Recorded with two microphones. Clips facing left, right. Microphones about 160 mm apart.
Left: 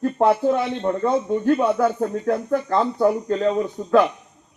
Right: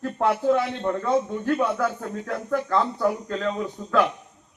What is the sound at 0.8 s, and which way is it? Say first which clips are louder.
A man's voice: left 2 dB; 25° left (ahead or behind).